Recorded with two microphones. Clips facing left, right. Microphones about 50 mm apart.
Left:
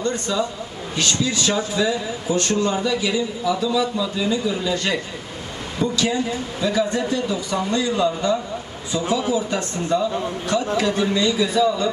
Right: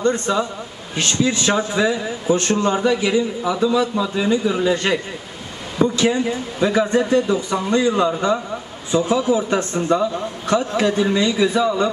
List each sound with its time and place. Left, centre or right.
0.0 s a man's voice: right